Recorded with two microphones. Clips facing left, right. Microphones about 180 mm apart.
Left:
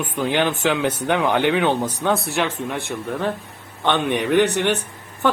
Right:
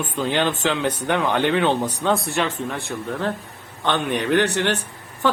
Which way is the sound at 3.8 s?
15° left (ahead or behind).